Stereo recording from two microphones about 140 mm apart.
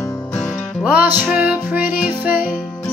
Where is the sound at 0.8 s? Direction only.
10° right (ahead or behind).